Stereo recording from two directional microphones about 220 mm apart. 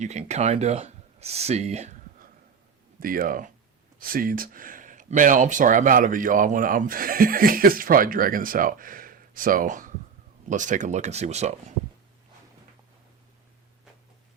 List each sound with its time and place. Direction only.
0.0 s speech: 30° right (ahead or behind)